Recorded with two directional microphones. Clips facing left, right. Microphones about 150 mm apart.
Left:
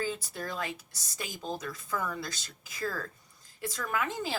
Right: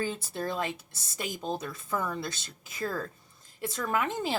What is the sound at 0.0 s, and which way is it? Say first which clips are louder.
Speech: right 2 dB; 25° right (ahead or behind).